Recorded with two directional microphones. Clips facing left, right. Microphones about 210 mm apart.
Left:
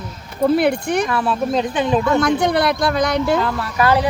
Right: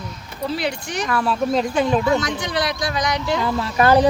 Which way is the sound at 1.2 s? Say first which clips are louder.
Left 1 dB; centre (ahead or behind).